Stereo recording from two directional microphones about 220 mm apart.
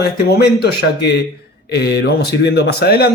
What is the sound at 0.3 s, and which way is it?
Speech, 45° left (ahead or behind).